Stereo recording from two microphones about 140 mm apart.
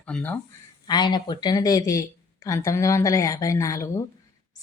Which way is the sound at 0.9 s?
30° left (ahead or behind).